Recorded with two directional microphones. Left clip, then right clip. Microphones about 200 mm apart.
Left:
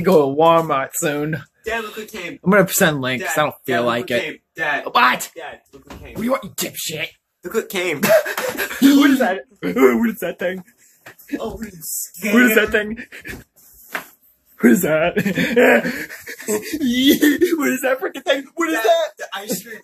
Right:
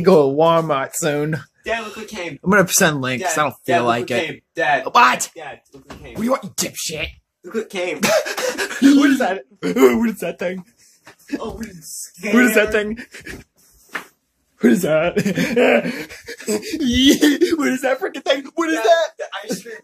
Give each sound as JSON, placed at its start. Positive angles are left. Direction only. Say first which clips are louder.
{"t": 0.0, "sound": "speech", "louder": "right 1 dB", "side_deg": -20}
{"t": 2.4, "sound": "speech", "louder": "even", "side_deg": -15}
{"t": 7.5, "sound": "speech", "louder": "left 2 dB", "side_deg": 50}
{"t": 8.0, "sound": "speech", "louder": "left 2 dB", "side_deg": -5}
{"t": 11.2, "sound": "speech", "louder": "left 1 dB", "side_deg": -25}
{"t": 14.6, "sound": "a man's voice", "louder": "left 1 dB", "side_deg": 5}
{"t": 14.9, "sound": "speech", "louder": "even", "side_deg": -10}
{"t": 15.6, "sound": "speech", "louder": "left 2 dB", "side_deg": -5}